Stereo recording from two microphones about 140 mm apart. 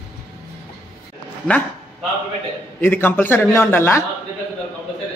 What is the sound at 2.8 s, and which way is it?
A man's voice, 15° left (ahead or behind).